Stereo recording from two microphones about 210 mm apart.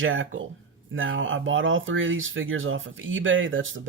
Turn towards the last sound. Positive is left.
turn(degrees=-65)  # may be behind; listen again after turning